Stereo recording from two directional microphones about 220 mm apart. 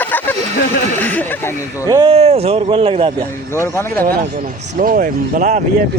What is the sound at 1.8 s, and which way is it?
Speech, 20° right (ahead or behind).